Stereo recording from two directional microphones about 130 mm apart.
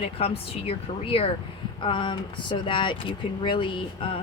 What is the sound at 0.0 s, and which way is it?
A woman's voice, 50° left (ahead or behind).